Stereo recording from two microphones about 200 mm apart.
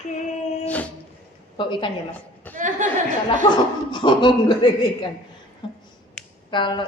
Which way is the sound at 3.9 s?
25° left (ahead or behind).